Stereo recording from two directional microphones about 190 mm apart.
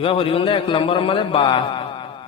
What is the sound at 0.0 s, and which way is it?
A man's voice, 30° left (ahead or behind).